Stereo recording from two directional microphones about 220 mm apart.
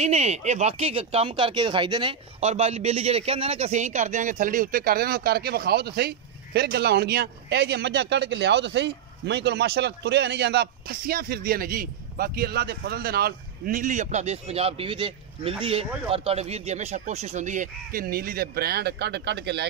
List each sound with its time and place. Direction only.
0.0 s speech: 30° right (ahead or behind); by 19.6 s 50° right (ahead or behind)